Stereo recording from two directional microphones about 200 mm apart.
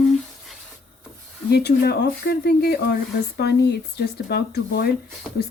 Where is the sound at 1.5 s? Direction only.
50° left (ahead or behind).